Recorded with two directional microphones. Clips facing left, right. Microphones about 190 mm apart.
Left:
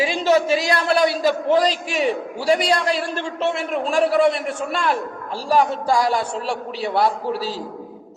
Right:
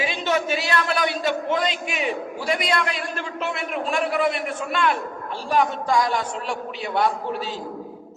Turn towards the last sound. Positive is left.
turn(degrees=35)  # may be behind; listen again after turning